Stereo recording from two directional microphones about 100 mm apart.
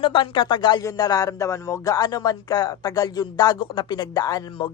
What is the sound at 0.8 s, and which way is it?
Speech, 35° left (ahead or behind).